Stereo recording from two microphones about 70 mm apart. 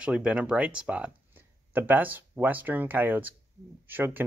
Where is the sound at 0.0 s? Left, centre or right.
Centre.